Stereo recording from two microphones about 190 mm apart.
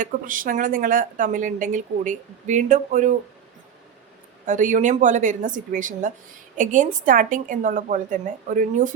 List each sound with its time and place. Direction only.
0.0 s a woman's voice: 45° right (ahead or behind)
4.4 s a woman's voice: 40° right (ahead or behind)